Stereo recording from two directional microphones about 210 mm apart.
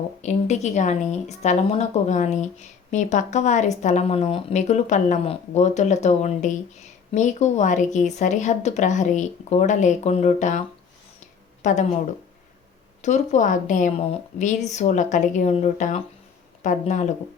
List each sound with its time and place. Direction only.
0.2 s a woman's voice: 35° left (ahead or behind)
11.6 s speech: 35° left (ahead or behind)
13.0 s a woman's voice: 35° left (ahead or behind)